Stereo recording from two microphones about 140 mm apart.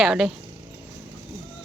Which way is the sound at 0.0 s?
Centre (ahead or behind).